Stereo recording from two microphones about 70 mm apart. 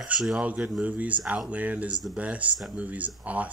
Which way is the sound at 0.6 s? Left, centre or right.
Centre.